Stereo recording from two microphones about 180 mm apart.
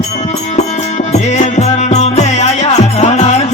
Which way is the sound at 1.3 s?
40° left (ahead or behind).